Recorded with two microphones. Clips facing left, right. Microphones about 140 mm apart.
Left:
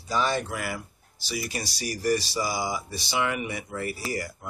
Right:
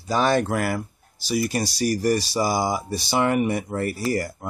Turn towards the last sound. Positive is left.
turn(degrees=-45)  # may be behind; listen again after turning